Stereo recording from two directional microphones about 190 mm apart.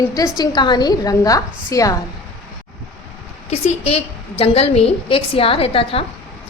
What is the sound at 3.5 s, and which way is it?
A woman's voice, 35° left (ahead or behind).